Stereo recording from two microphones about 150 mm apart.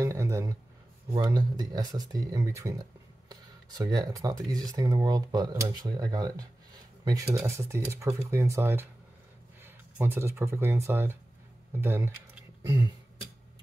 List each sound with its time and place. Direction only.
0.0 s a sound: 20° right (ahead or behind)
1.1 s speech: 25° right (ahead or behind)
7.3 s speech: 20° right (ahead or behind)